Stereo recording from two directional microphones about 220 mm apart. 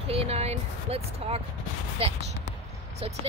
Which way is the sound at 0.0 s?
25° right (ahead or behind).